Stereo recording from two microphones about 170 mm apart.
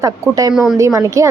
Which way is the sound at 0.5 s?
Centre (ahead or behind).